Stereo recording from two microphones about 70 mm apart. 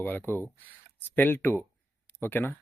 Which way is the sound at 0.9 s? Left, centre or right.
Left.